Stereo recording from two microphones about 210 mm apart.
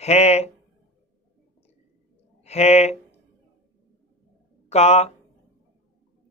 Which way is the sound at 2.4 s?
30° left (ahead or behind).